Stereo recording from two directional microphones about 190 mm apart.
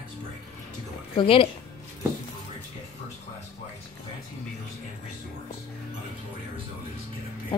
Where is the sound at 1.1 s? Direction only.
30° left (ahead or behind).